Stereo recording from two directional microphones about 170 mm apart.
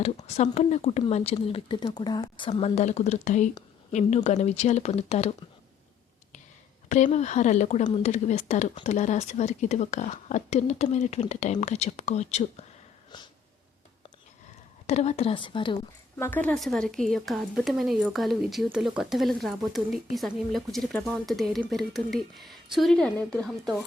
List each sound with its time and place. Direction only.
0.0 s speech: 40° left (ahead or behind)
6.8 s speech: 45° left (ahead or behind)
14.8 s speech: 40° left (ahead or behind)
16.1 s a woman's voice: 10° left (ahead or behind)